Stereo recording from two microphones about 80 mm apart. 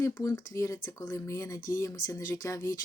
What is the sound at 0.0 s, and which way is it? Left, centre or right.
Speech, left.